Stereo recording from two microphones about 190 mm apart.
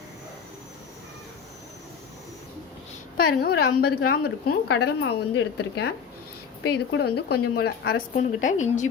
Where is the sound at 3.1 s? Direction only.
55° left (ahead or behind).